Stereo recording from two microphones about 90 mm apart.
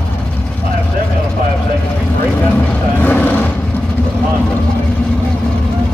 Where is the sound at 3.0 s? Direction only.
20° left (ahead or behind).